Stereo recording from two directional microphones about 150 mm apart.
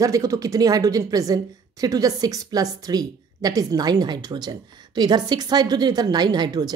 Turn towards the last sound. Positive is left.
turn(degrees=-25)  # may be behind; listen again after turning